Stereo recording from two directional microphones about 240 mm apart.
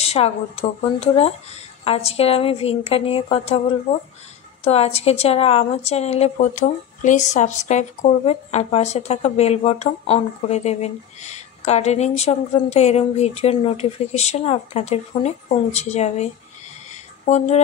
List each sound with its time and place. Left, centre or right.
0.0 s a woman's voice: left
4.6 s a woman's voice: left